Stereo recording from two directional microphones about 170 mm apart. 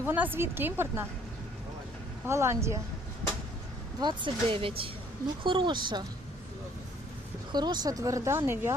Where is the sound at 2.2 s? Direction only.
15° right (ahead or behind).